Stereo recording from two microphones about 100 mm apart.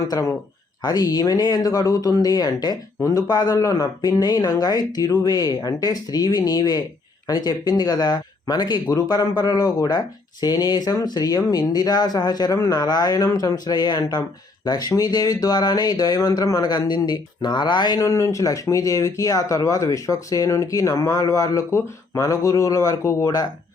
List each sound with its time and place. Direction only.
0.1 s speech: 35° left (ahead or behind)